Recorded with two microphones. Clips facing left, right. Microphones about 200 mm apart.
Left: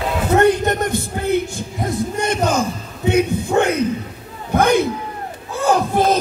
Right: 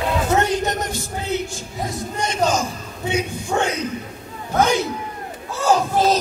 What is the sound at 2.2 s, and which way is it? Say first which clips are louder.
Speech: left 1 dB; 55° left (ahead or behind).